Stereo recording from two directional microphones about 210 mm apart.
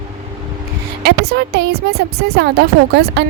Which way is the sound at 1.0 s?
50° right (ahead or behind).